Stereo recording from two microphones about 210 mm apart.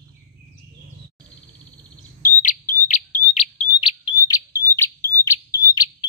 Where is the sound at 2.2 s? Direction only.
40° left (ahead or behind); by 5.9 s 20° left (ahead or behind).